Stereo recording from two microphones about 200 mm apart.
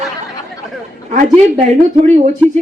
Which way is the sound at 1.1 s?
35° right (ahead or behind).